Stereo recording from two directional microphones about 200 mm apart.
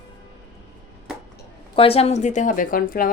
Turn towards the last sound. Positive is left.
turn(degrees=45)  # may be behind; listen again after turning